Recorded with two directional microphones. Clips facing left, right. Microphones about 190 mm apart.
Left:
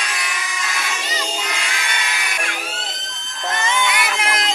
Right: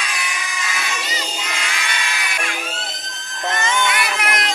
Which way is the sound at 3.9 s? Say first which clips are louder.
Even; 25° left (ahead or behind).